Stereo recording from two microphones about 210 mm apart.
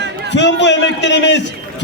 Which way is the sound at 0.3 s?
55° left (ahead or behind).